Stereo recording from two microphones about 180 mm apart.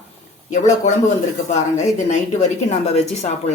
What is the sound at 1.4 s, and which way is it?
Speech, 40° left (ahead or behind).